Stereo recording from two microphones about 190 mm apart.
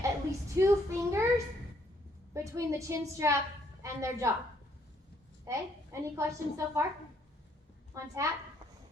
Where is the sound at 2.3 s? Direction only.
15° right (ahead or behind).